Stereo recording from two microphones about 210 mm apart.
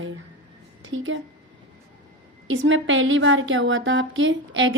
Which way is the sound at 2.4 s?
65° right (ahead or behind).